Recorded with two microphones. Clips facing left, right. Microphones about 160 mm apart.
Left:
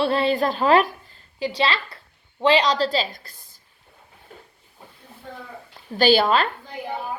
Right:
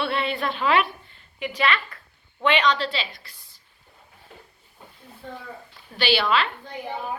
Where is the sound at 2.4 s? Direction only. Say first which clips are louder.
Left 3 dB; 35° left (ahead or behind).